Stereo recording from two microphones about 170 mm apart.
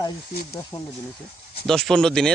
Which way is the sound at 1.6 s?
Centre (ahead or behind).